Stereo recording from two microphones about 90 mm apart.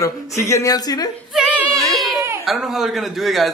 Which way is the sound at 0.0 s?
35° left (ahead or behind).